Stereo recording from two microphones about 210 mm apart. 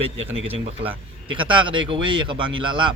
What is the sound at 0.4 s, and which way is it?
Speech, 25° right (ahead or behind).